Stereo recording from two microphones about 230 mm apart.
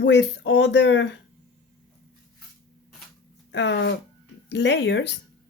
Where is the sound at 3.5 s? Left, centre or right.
Left.